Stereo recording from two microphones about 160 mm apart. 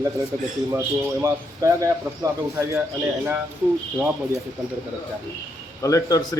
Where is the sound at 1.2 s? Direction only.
20° right (ahead or behind).